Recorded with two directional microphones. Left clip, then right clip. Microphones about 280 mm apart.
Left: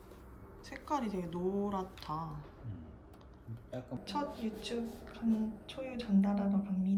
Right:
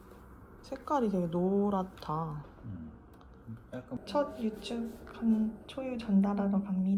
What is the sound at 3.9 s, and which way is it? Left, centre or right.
Speech, centre.